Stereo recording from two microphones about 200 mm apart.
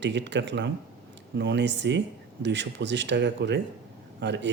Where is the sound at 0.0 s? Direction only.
60° right (ahead or behind).